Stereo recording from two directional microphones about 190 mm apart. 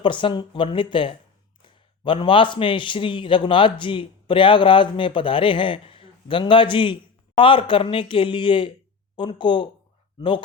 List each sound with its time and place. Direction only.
0.0 s a man's voice: 25° left (ahead or behind)